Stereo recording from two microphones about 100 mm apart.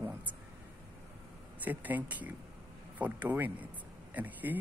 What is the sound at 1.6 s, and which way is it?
Speech, 15° right (ahead or behind).